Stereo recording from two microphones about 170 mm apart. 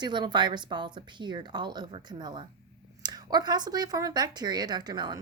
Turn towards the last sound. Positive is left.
turn(degrees=-25)  # may be behind; listen again after turning